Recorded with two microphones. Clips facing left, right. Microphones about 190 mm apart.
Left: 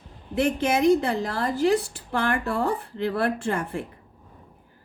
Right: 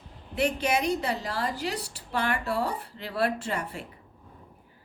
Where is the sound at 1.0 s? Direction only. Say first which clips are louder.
Left 4 dB; 50° left (ahead or behind).